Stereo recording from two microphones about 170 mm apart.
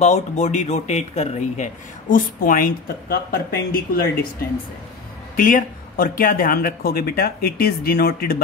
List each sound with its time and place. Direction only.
0.0 s speech: 45° left (ahead or behind); by 4.3 s 60° left (ahead or behind)
5.3 s speech: 55° left (ahead or behind)